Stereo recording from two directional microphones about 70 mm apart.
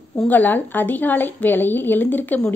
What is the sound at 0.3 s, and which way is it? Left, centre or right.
A woman's voice, left.